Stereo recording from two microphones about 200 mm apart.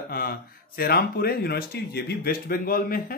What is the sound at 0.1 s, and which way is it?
Speech, 50° left (ahead or behind).